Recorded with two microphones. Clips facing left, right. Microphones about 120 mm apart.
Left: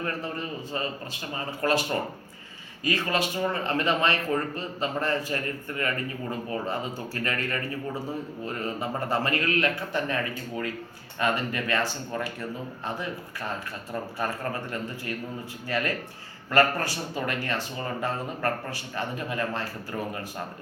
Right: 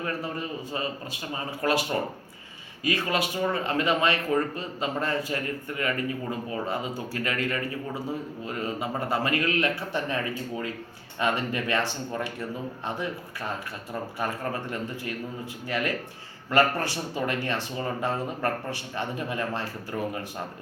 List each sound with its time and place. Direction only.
0.0 s speech: 15° right (ahead or behind)
7.3 s speech: 15° right (ahead or behind)
12.8 s speech: 20° right (ahead or behind)